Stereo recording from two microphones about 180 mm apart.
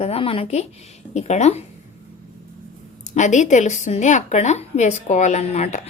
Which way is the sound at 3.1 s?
40° left (ahead or behind).